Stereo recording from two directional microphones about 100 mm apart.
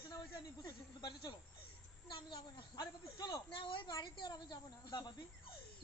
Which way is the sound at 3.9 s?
45° left (ahead or behind).